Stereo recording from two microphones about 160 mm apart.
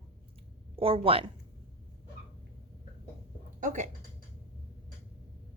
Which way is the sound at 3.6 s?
50° right (ahead or behind).